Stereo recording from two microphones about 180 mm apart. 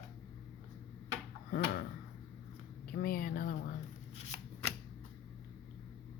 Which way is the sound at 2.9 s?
55° left (ahead or behind).